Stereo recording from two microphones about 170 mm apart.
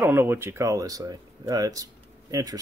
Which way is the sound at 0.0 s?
15° right (ahead or behind).